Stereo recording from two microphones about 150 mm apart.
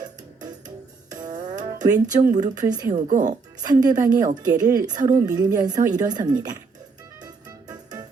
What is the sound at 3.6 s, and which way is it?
A woman's voice, 25° right (ahead or behind).